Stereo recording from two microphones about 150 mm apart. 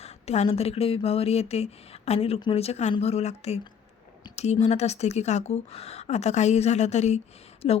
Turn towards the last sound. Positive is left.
turn(degrees=45)  # may be behind; listen again after turning